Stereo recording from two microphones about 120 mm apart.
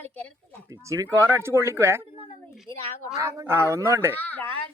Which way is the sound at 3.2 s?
25° right (ahead or behind).